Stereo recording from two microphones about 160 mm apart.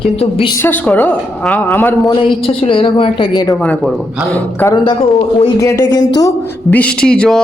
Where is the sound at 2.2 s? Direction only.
35° left (ahead or behind).